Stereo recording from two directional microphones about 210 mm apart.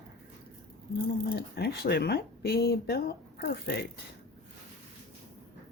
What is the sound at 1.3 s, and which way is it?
Speech, 50° left (ahead or behind).